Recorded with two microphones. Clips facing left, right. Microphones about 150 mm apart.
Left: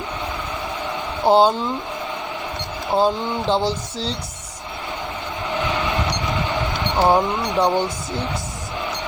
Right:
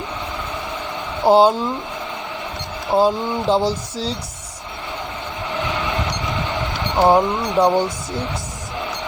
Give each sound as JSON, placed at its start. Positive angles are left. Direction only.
{"t": 1.2, "sound": "speech", "side_deg": -5}
{"t": 2.9, "sound": "speech", "side_deg": -5}
{"t": 6.9, "sound": "speech", "side_deg": -15}
{"t": 7.2, "sound": "speech", "side_deg": 0}